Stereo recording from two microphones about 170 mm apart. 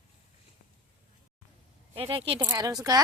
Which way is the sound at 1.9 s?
30° right (ahead or behind).